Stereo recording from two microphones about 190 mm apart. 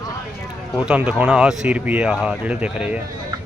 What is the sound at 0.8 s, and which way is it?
Speech, 5° right (ahead or behind).